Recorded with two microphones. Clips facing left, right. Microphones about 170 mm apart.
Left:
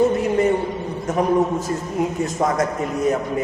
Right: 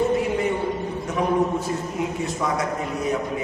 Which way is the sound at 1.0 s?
45° left (ahead or behind).